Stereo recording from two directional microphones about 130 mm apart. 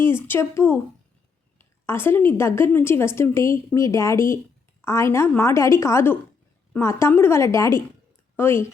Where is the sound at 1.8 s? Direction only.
15° left (ahead or behind).